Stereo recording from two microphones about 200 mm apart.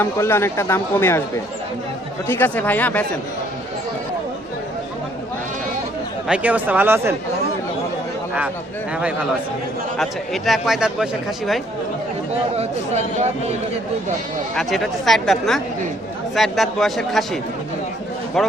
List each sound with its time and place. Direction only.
0.0 s speech: 10° left (ahead or behind)
2.2 s speech: 10° left (ahead or behind)
6.2 s speech: 5° right (ahead or behind)
10.0 s speech: centre (ahead or behind)
12.5 s speech: 35° right (ahead or behind)
14.5 s speech: centre (ahead or behind)
18.4 s speech: centre (ahead or behind)